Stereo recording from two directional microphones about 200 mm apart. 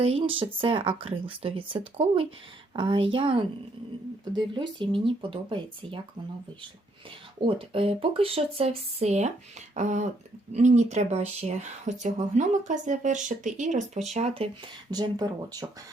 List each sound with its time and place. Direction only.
0.0 s speech: 25° right (ahead or behind)
7.4 s speech: 25° right (ahead or behind)
14.8 s speech: 20° right (ahead or behind)